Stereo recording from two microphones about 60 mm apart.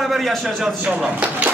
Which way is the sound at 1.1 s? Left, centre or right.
Right.